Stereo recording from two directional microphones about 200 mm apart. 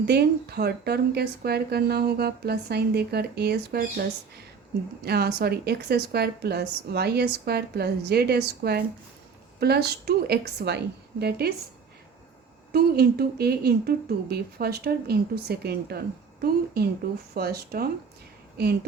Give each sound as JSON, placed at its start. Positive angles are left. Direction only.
{"t": 0.0, "sound": "a woman's voice", "side_deg": -55}
{"t": 5.0, "sound": "a woman's voice", "side_deg": -55}
{"t": 12.7, "sound": "a woman's voice", "side_deg": -50}